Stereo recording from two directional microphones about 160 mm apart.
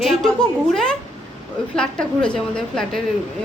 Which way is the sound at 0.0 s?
Centre (ahead or behind).